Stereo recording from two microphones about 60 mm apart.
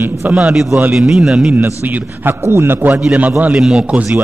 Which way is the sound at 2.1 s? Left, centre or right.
Right.